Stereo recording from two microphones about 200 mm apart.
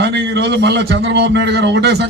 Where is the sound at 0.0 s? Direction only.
55° right (ahead or behind).